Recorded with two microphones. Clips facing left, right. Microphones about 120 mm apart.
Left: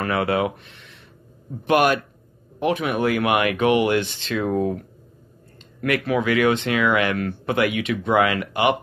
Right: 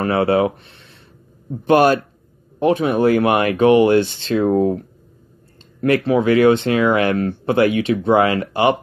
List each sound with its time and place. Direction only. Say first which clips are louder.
0.0 s speech: right 5 dB; 30° right (ahead or behind)